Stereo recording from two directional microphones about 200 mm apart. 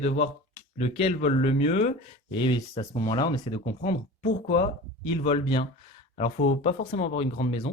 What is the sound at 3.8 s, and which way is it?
Speech, 30° left (ahead or behind).